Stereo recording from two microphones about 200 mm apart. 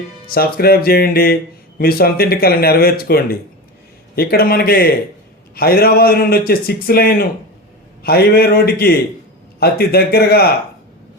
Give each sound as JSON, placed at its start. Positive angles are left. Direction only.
{"t": 0.3, "sound": "a man's voice", "side_deg": 50}